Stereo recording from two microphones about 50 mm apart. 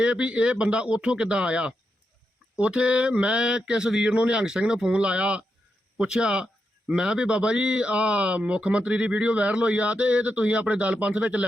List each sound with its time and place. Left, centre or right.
0.0 s a man's voice: right
2.6 s mantra: centre
4.1 s speech: right
7.9 s speech: right